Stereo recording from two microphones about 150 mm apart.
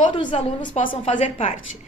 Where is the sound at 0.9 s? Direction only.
35° left (ahead or behind).